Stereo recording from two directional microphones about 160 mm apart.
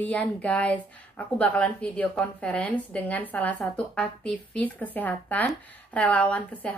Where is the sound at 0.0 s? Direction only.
10° left (ahead or behind).